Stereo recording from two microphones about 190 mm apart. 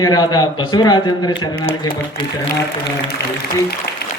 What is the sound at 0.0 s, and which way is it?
A man's voice, 20° left (ahead or behind).